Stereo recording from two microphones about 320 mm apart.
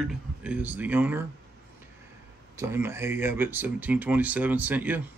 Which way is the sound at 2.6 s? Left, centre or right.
Centre.